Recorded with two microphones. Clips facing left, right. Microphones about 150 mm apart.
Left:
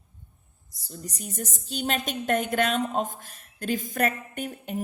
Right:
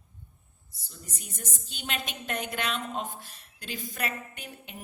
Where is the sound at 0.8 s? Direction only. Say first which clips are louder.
Left 9 dB; 40° left (ahead or behind).